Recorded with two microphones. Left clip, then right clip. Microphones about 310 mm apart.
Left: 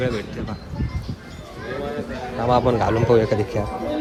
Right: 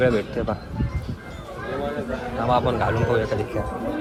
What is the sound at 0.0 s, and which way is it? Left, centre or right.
Speech, centre.